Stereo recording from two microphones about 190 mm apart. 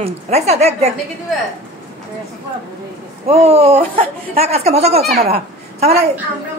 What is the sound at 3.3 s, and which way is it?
A woman's voice, 30° right (ahead or behind).